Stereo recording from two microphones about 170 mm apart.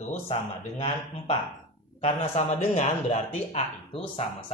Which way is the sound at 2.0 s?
40° left (ahead or behind).